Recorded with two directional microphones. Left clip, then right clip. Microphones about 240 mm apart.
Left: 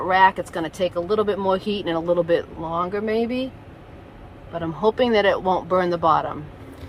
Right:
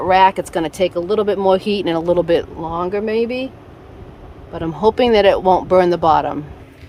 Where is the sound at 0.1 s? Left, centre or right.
Right.